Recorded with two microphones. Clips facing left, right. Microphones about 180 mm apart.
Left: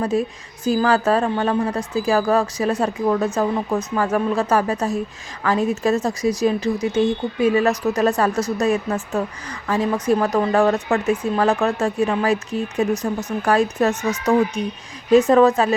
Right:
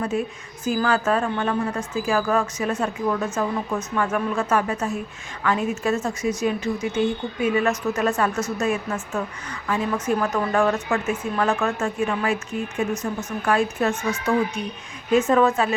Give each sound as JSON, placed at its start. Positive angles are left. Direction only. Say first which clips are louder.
{"t": 0.0, "sound": "a woman's voice", "louder": "left 4 dB", "side_deg": 35}